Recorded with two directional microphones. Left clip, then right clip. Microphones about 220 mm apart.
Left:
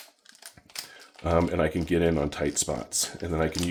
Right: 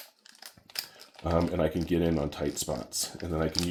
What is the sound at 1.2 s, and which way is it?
Speech, 30° left (ahead or behind).